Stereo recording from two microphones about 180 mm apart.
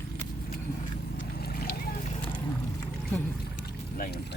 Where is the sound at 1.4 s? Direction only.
60° left (ahead or behind).